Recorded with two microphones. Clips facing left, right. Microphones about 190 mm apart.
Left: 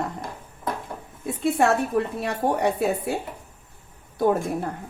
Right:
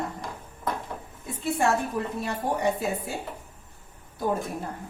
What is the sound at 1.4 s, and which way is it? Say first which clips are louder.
A woman's voice: left 4 dB; 70° left (ahead or behind).